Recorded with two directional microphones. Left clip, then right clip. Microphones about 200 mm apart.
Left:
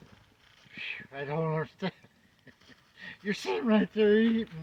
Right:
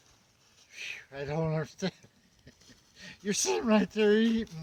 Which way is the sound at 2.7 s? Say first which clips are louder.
Left 4 dB; 90° right.